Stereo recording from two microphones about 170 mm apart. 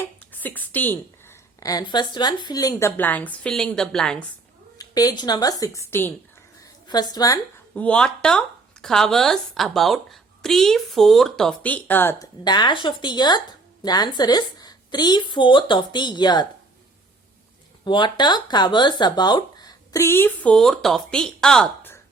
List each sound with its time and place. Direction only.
0.3 s a woman's voice: 10° left (ahead or behind)
4.8 s speech: 20° left (ahead or behind)
6.6 s a sound: 25° left (ahead or behind)
7.8 s speech: 5° left (ahead or behind)
12.5 s speech: 25° left (ahead or behind)
17.8 s speech: 25° left (ahead or behind); by 21.9 s 5° left (ahead or behind)